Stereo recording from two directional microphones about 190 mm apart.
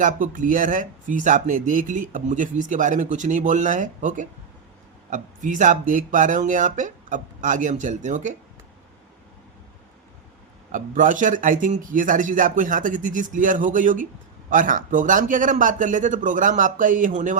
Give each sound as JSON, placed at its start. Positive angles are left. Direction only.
{"t": 0.0, "sound": "speech", "side_deg": -45}
{"t": 10.7, "sound": "speech", "side_deg": -45}